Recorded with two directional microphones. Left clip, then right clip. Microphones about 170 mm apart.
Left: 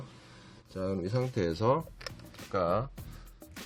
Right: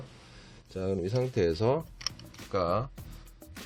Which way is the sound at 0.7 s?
20° right (ahead or behind).